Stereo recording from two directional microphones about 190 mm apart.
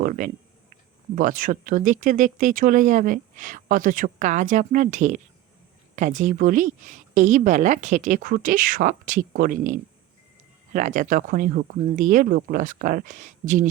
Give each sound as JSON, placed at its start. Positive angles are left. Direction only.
{"t": 0.2, "sound": "speech", "side_deg": -40}